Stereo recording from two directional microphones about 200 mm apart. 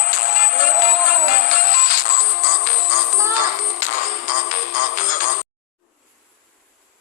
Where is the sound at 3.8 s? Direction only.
40° left (ahead or behind).